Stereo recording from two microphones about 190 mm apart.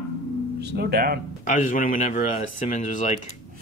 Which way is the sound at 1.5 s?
45° left (ahead or behind).